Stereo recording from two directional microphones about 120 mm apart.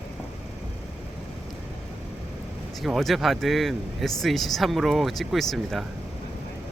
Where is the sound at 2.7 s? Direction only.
Centre (ahead or behind).